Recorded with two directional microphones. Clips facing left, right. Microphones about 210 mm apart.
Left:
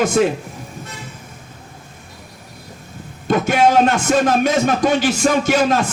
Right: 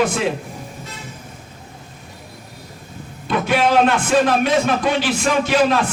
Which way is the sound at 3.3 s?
45° left (ahead or behind).